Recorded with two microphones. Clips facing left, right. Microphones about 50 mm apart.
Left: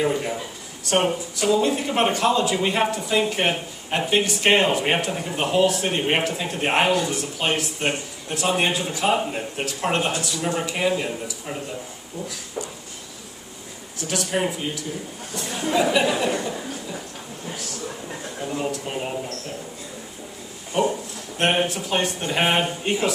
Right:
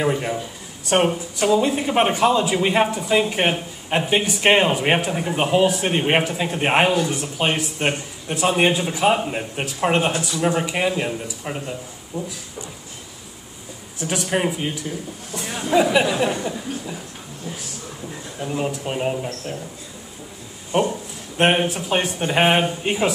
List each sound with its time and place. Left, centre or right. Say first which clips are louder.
0.0 s speech: right 1 dB; centre
1.5 s speech: right 2 dB; centre
13.9 s speech: right 2 dB; right
18.4 s speech: right 3 dB; centre
21.4 s speech: right 3 dB; right